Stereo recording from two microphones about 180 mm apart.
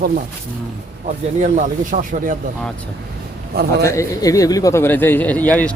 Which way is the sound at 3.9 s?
15° left (ahead or behind).